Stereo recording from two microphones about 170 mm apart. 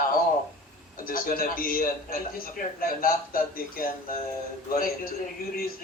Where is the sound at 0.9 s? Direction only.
55° left (ahead or behind).